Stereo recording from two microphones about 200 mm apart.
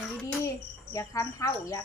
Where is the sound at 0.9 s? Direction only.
15° left (ahead or behind).